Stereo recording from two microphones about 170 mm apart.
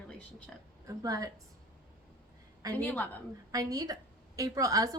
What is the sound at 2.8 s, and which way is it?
Speech, 10° left (ahead or behind).